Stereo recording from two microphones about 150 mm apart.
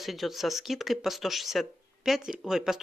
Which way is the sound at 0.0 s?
Centre (ahead or behind).